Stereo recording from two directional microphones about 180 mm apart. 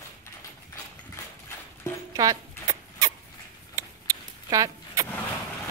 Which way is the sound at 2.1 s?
20° right (ahead or behind).